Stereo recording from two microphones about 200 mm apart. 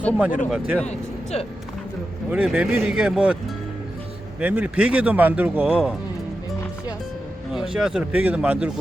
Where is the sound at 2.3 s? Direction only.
5° right (ahead or behind).